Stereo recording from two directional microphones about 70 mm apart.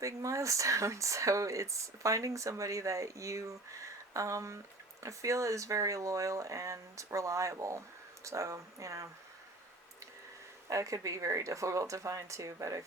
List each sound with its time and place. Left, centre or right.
0.0 s speech: right
10.7 s speech: right